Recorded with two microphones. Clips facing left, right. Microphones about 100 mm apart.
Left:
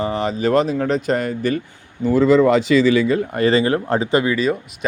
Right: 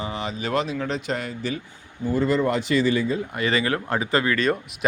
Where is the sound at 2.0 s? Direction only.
90° left.